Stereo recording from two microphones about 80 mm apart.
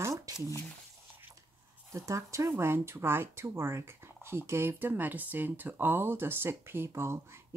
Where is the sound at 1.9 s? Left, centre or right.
Right.